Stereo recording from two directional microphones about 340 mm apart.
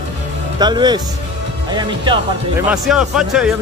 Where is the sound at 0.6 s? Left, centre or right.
Centre.